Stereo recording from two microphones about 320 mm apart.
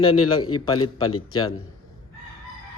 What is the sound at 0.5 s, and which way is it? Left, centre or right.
Speech, centre.